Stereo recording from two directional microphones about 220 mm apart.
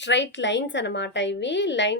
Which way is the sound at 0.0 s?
55° left (ahead or behind).